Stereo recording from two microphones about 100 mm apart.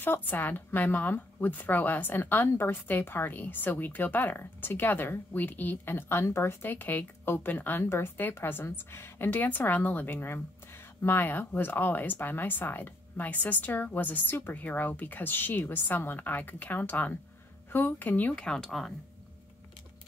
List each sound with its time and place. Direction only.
0.0 s a woman's voice: 20° left (ahead or behind); by 18.9 s 5° left (ahead or behind)